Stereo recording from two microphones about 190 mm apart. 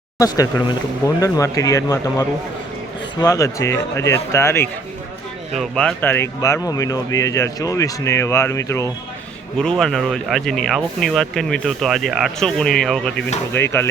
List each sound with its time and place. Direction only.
0.2 s speech: 20° left (ahead or behind)
9.6 s speech: 5° left (ahead or behind)